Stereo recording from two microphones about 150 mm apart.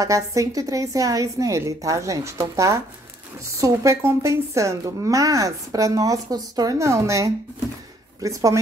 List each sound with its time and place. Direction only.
0.0 s a woman's voice: 20° right (ahead or behind)